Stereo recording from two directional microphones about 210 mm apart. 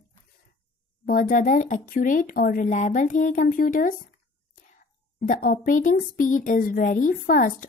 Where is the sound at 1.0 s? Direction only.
40° left (ahead or behind).